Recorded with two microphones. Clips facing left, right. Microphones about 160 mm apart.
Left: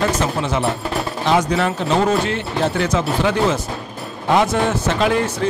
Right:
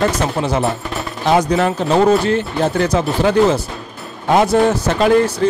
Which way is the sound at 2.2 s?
40° right (ahead or behind).